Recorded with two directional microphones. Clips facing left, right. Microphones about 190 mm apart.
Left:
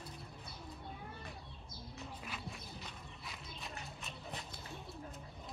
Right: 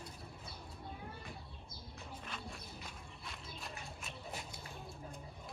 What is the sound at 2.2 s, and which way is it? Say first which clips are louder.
Walk: left 1 dB; centre (ahead or behind).